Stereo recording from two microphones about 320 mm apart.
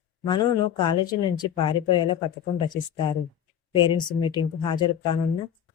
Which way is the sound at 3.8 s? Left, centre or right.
Centre.